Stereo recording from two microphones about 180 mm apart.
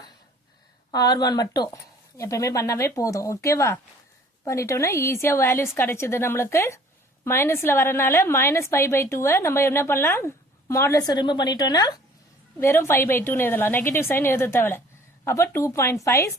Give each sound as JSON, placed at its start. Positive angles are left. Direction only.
{"t": 0.9, "sound": "a woman's voice", "side_deg": 20}